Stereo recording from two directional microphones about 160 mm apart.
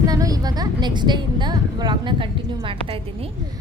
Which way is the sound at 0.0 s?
25° right (ahead or behind).